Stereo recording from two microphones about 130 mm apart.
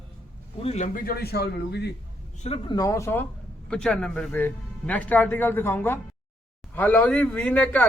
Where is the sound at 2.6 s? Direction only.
30° left (ahead or behind).